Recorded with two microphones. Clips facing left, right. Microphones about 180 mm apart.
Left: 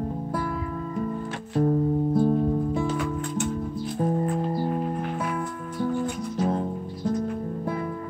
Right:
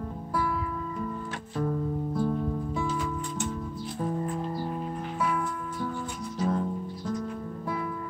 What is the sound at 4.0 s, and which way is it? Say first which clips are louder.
Music: left 5 dB; 50° left (ahead or behind).